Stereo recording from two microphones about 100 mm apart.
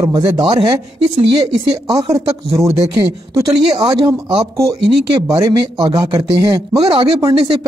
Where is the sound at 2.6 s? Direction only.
35° right (ahead or behind).